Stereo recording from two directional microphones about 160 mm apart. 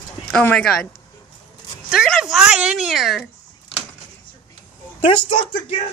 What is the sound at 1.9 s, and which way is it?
A woman's voice, centre (ahead or behind).